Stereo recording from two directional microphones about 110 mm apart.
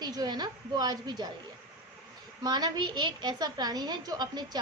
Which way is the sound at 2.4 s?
40° right (ahead or behind).